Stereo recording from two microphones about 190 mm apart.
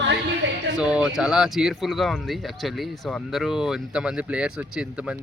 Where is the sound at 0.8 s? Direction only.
5° right (ahead or behind).